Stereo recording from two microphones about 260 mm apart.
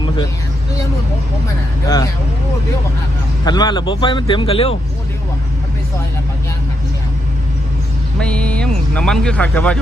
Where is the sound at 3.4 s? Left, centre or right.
Centre.